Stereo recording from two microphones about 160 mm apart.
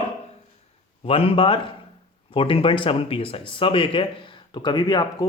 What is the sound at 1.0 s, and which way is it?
A man's voice, 35° left (ahead or behind).